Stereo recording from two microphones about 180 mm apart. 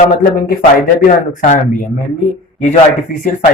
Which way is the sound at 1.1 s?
45° left (ahead or behind).